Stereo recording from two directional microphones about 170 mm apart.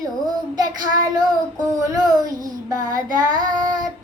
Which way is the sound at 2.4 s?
20° right (ahead or behind).